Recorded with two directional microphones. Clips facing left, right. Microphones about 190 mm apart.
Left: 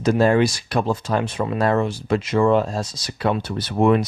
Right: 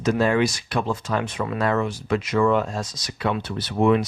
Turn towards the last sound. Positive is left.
turn(degrees=45)  # may be behind; listen again after turning